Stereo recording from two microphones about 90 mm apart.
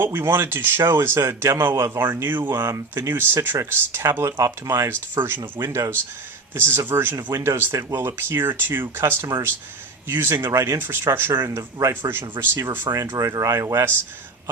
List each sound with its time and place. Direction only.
0.0 s speech: 25° right (ahead or behind)
5.4 s speech: 35° right (ahead or behind)
6.5 s speech: 25° right (ahead or behind)
11.4 s speech: 35° right (ahead or behind)
13.1 s speech: 40° right (ahead or behind)